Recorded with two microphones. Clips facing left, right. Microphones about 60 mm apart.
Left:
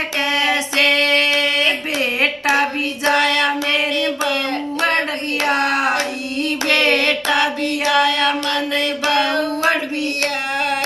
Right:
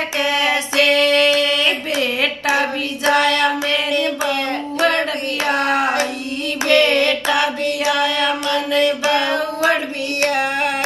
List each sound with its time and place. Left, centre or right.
0.7 s female singing: left
2.0 s a sound: left
3.9 s a sound: right
4.7 s child singing: left
6.7 s mantra: left
8.8 s mantra: right